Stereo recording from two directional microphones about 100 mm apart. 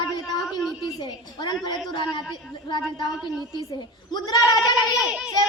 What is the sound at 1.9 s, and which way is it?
A woman's voice, 50° left (ahead or behind).